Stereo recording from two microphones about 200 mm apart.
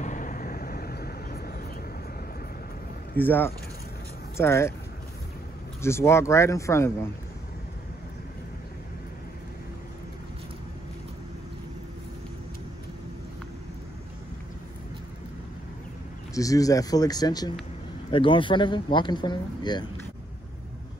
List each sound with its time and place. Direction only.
0.0 s vehicle: 40° left (ahead or behind)
3.2 s speech: 10° left (ahead or behind)
5.8 s speech: 15° left (ahead or behind)
16.3 s speech: 15° left (ahead or behind)